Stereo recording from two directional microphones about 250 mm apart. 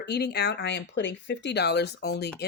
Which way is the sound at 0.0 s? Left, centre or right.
Left.